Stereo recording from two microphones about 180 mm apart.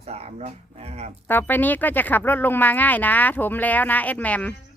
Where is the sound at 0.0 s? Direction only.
35° right (ahead or behind).